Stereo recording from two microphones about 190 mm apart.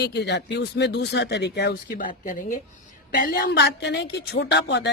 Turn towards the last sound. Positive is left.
turn(degrees=65)  # may be behind; listen again after turning